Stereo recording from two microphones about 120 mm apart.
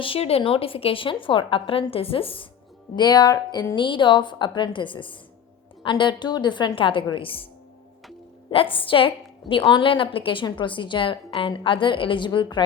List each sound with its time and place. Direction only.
0.0 s a woman's voice: 50° left (ahead or behind)
2.9 s a woman's voice: 35° left (ahead or behind)
8.7 s a woman's voice: 45° left (ahead or behind)